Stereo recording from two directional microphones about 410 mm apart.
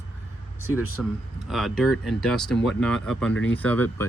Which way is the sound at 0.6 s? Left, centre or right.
Centre.